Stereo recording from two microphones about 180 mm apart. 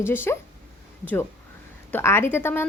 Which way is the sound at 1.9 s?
15° left (ahead or behind).